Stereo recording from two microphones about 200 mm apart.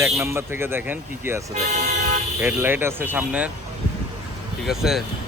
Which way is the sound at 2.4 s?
10° right (ahead or behind).